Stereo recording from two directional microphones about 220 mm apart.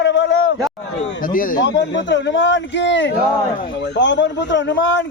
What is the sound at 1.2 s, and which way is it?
Speech, 40° left (ahead or behind).